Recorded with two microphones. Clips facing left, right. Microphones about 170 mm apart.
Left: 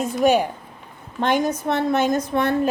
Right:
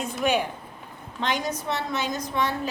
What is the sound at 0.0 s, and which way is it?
A woman's voice, 45° left (ahead or behind).